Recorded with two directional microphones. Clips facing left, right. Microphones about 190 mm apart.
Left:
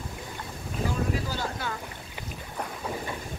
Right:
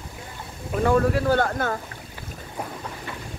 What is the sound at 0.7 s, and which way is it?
Speech, 60° right (ahead or behind).